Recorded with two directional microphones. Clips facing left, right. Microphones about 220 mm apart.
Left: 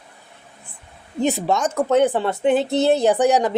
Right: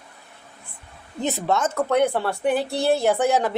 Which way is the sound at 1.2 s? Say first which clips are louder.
Left 3 dB; 15° left (ahead or behind).